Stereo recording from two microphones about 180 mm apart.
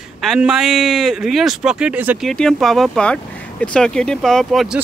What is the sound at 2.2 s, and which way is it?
Speech, centre (ahead or behind).